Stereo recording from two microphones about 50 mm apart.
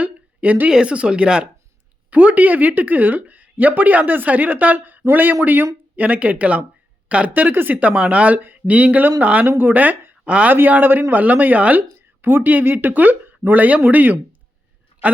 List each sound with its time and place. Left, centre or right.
0.0 s a sound: right
0.7 s speech: centre
2.0 s speech: right
7.8 s speech: right
9.5 s speech: right
10.2 s speech: right
10.5 s speech: right
11.9 s speech: right